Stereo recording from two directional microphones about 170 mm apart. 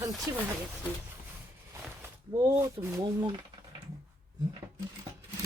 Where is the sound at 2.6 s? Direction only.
15° right (ahead or behind).